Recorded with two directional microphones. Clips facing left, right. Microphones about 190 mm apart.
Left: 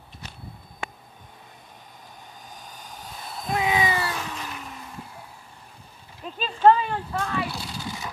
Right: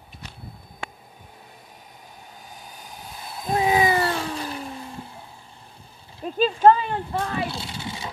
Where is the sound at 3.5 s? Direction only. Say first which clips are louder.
Right 4 dB; 35° right (ahead or behind).